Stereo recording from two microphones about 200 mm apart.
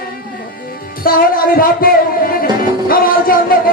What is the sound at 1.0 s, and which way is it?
Speech, 45° left (ahead or behind).